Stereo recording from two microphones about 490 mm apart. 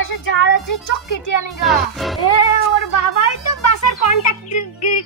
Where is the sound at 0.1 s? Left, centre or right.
Left.